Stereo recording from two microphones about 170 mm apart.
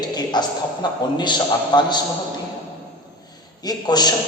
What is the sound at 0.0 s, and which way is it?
A man's voice, 25° left (ahead or behind).